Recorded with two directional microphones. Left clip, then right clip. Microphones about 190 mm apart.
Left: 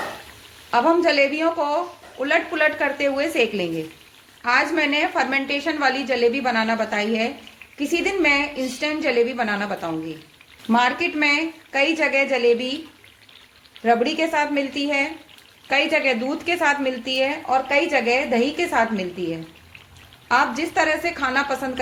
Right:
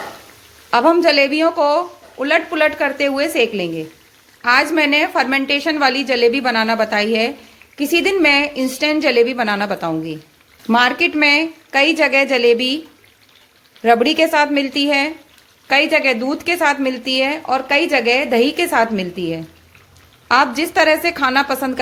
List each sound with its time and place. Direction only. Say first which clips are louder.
0.7 s speech: right 5 dB; 40° right (ahead or behind)
4.4 s speech: right 5 dB; 40° right (ahead or behind)
13.8 s speech: right 6 dB; 40° right (ahead or behind)